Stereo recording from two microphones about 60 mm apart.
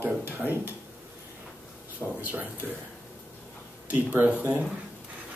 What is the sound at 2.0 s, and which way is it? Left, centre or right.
Speech, right.